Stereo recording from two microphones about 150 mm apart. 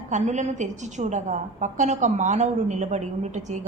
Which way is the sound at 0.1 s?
50° right (ahead or behind).